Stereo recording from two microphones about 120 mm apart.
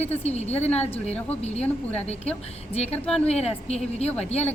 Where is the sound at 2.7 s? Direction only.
60° left (ahead or behind).